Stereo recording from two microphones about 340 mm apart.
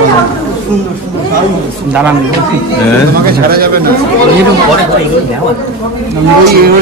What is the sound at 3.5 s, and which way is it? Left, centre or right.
Speech, right.